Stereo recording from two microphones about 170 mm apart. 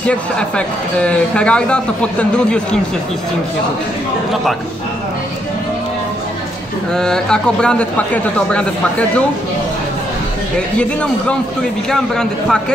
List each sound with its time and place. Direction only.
0.0 s a man's voice: 5° left (ahead or behind)
6.9 s a man's voice: 5° left (ahead or behind)
10.8 s a man's voice: 5° left (ahead or behind)